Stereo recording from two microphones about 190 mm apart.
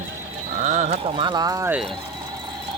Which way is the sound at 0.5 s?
40° right (ahead or behind).